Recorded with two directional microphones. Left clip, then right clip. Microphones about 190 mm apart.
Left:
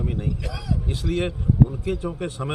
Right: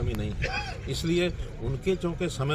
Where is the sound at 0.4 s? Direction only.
60° left (ahead or behind).